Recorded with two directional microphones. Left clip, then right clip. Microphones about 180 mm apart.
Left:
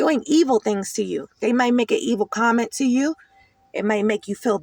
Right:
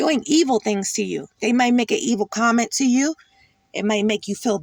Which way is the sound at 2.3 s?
40° right (ahead or behind).